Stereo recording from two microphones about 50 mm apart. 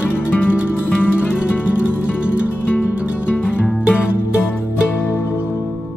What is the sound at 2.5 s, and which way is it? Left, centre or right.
Music, left.